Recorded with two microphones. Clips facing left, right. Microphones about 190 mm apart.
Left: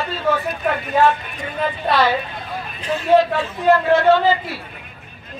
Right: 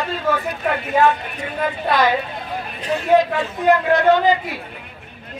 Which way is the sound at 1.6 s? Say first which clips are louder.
Even; 15° right (ahead or behind).